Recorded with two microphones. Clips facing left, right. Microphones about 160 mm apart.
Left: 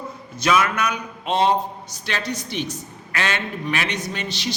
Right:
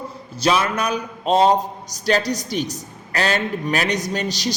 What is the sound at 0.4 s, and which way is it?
A man's voice, 30° right (ahead or behind).